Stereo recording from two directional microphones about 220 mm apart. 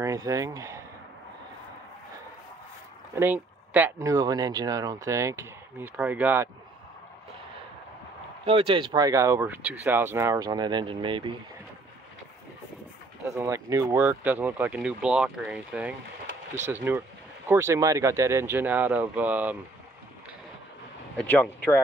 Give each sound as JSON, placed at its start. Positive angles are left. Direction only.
{"t": 0.0, "sound": "speech", "side_deg": -15}
{"t": 3.2, "sound": "speech", "side_deg": -10}
{"t": 8.5, "sound": "speech", "side_deg": -25}
{"t": 13.3, "sound": "speech", "side_deg": -15}
{"t": 21.2, "sound": "speech", "side_deg": 5}